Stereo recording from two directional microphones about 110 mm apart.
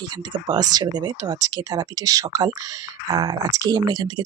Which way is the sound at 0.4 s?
40° right (ahead or behind).